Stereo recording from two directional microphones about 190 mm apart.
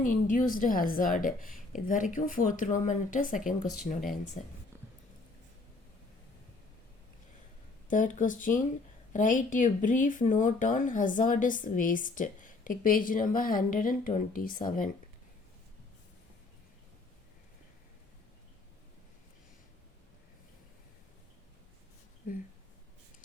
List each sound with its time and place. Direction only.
0.0 s speech: 45° left (ahead or behind)
7.9 s speech: 45° left (ahead or behind)